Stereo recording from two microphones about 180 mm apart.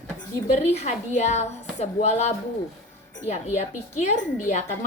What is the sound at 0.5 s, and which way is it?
A woman's voice, 40° left (ahead or behind).